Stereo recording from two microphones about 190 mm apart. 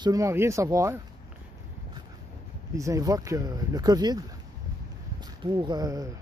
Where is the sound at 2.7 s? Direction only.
15° right (ahead or behind).